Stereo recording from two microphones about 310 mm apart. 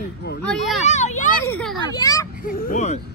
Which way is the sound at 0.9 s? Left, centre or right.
Left.